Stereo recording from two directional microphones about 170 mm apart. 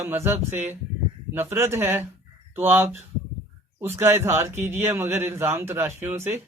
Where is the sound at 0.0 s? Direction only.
15° right (ahead or behind).